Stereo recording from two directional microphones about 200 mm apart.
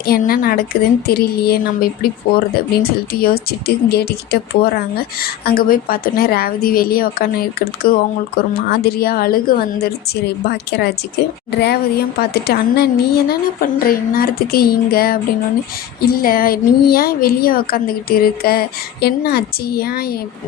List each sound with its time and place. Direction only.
0.0 s a woman's voice: 50° left (ahead or behind)